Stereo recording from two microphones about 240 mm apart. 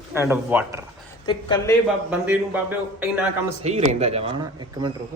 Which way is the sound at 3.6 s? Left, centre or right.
Right.